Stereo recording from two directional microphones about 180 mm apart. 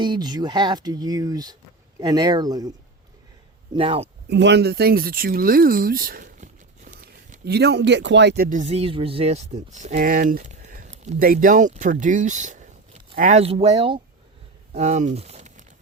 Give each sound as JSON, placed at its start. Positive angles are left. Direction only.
{"t": 0.0, "sound": "speech", "side_deg": -25}
{"t": 4.3, "sound": "speech", "side_deg": -75}
{"t": 7.4, "sound": "speech", "side_deg": -65}
{"t": 14.7, "sound": "speech", "side_deg": -40}